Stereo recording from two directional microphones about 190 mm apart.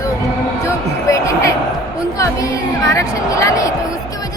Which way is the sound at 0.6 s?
15° left (ahead or behind).